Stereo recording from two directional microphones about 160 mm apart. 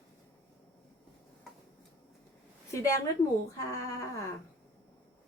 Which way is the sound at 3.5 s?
20° left (ahead or behind).